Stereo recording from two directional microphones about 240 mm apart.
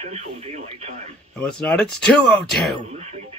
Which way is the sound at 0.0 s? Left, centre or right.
Right.